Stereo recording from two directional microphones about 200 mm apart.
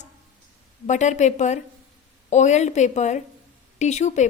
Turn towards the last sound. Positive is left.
turn(degrees=35)  # may be behind; listen again after turning